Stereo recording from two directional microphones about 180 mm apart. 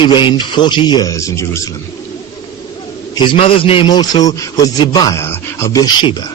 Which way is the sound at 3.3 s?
30° left (ahead or behind).